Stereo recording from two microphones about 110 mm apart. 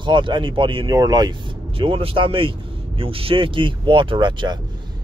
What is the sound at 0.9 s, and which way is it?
Speech, 35° right (ahead or behind).